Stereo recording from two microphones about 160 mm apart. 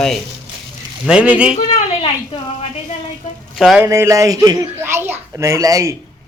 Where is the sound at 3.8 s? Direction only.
20° right (ahead or behind).